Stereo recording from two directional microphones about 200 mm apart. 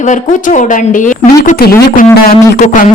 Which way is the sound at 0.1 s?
40° left (ahead or behind).